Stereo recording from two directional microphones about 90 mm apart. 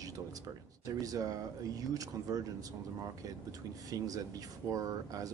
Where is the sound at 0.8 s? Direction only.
45° right (ahead or behind).